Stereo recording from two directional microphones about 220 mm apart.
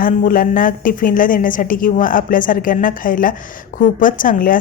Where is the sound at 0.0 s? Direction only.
40° left (ahead or behind).